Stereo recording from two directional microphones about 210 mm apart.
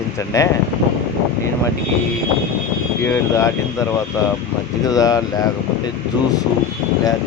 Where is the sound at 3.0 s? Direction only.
15° left (ahead or behind).